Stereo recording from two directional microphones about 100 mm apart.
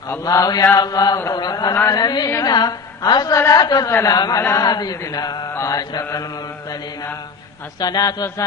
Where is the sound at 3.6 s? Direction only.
40° left (ahead or behind).